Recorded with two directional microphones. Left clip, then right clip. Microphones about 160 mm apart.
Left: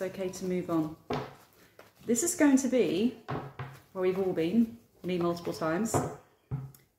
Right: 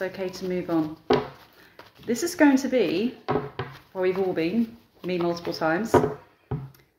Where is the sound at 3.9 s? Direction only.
30° left (ahead or behind).